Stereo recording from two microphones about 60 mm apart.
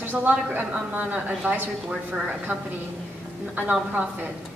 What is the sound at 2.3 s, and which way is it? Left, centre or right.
A woman's voice, right.